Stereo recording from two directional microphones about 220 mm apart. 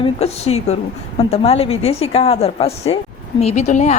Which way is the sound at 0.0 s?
30° left (ahead or behind).